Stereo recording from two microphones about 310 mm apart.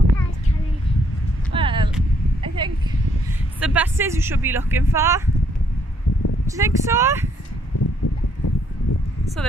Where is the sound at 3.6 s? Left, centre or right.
Centre.